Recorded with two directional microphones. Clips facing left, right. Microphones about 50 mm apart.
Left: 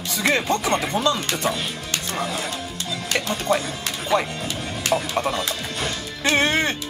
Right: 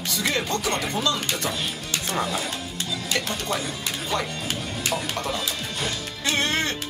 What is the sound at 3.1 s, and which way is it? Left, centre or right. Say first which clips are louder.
Speech: left 6 dB; left.